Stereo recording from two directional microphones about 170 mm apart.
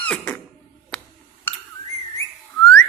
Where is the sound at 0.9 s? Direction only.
5° left (ahead or behind).